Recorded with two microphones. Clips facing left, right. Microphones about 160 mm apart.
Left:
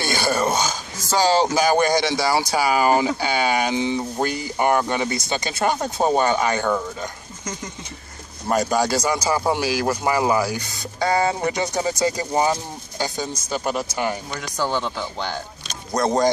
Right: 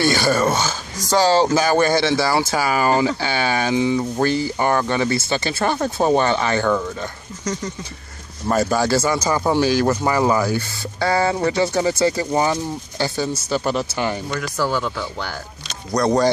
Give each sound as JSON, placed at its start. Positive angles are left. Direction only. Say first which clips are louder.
{"t": 0.0, "sound": "speech", "louder": "right 4 dB", "side_deg": 15}
{"t": 8.5, "sound": "speech", "louder": "right 2 dB", "side_deg": 15}